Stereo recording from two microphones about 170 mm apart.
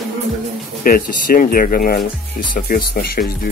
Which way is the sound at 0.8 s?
60° left (ahead or behind).